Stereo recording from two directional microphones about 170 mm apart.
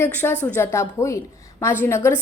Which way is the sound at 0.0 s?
10° left (ahead or behind).